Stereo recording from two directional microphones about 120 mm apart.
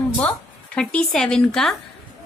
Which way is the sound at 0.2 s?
5° left (ahead or behind).